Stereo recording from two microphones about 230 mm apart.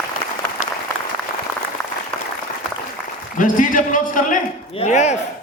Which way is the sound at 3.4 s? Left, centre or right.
Left.